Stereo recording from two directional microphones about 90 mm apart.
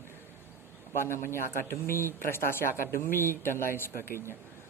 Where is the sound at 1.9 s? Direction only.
30° left (ahead or behind).